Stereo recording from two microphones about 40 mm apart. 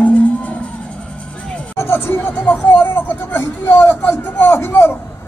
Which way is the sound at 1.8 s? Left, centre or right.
Left.